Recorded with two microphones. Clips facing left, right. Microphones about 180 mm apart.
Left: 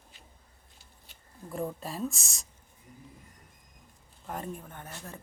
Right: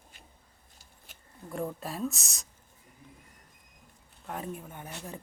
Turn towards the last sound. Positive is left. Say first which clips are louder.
# right 2 dB
turn(degrees=-10)  # may be behind; listen again after turning